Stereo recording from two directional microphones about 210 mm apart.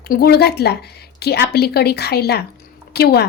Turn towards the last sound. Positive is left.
turn(degrees=50)  # may be behind; listen again after turning